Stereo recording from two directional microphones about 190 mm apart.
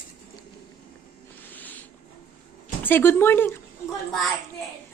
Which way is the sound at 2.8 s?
10° left (ahead or behind).